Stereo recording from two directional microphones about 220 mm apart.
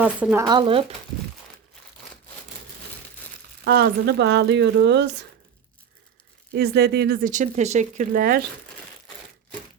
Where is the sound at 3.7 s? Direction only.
45° right (ahead or behind).